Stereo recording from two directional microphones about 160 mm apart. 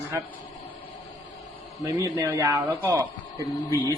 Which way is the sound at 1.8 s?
20° right (ahead or behind).